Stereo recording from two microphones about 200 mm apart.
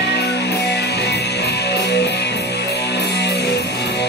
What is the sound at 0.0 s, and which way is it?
Music, 55° left (ahead or behind).